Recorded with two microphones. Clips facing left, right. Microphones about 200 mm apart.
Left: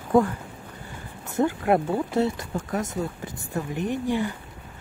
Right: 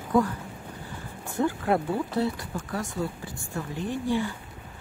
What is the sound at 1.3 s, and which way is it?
Speech, 20° left (ahead or behind).